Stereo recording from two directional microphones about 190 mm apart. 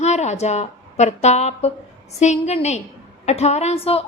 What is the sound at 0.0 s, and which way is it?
A woman's voice, 35° left (ahead or behind).